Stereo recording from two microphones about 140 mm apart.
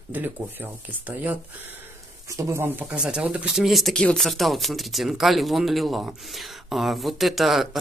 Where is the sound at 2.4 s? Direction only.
20° right (ahead or behind); by 7.8 s centre (ahead or behind).